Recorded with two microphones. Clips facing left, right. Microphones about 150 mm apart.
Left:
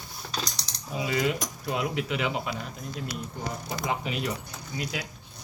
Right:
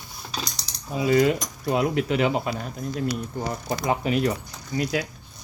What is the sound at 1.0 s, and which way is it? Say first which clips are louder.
Speech: right 8 dB; 45° right (ahead or behind).